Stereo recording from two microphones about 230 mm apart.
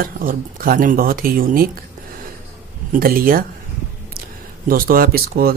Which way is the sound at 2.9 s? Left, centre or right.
Right.